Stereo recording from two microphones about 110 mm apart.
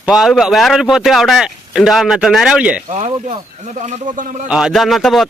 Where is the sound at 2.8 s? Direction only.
90° right.